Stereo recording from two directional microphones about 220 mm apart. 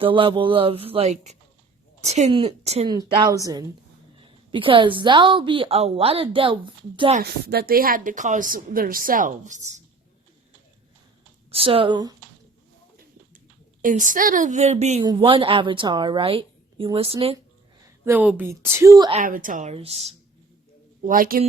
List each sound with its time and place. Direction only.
0.0 s a woman's voice: 25° right (ahead or behind)
7.2 s a woman's voice: 45° right (ahead or behind)
11.5 s a woman's voice: 25° right (ahead or behind)
13.8 s a woman's voice: 35° right (ahead or behind)
17.8 s a woman's voice: 10° right (ahead or behind)
19.1 s a woman's voice: 35° right (ahead or behind)
21.0 s a woman's voice: 40° right (ahead or behind)